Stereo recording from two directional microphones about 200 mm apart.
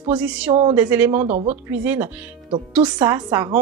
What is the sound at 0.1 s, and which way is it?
Speech, 5° right (ahead or behind).